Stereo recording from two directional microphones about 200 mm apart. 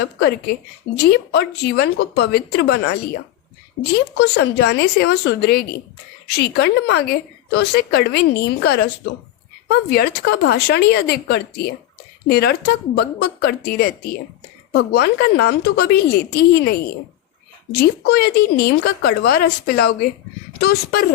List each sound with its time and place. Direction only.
0.0 s a woman's voice: 55° left (ahead or behind)
4.2 s a woman's voice: 55° left (ahead or behind)